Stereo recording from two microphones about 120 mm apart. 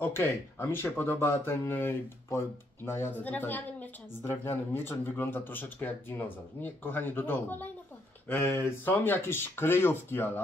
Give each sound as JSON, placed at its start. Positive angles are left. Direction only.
{"t": 0.0, "sound": "speech", "side_deg": 20}